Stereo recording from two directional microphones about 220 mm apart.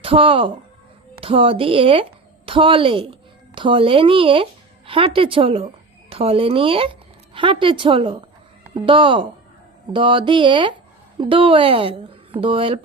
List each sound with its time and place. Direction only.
0.0 s speech: 25° right (ahead or behind)